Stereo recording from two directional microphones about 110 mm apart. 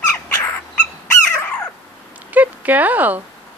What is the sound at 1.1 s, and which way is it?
Squeak, 20° left (ahead or behind).